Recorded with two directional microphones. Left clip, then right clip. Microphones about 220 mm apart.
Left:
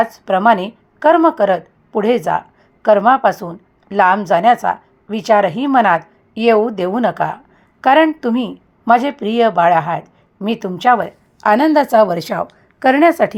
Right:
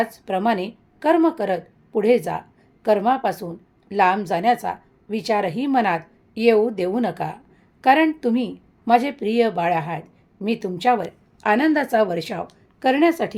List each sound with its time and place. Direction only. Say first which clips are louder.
0.0 s a woman's voice: left 9 dB; 15° left (ahead or behind)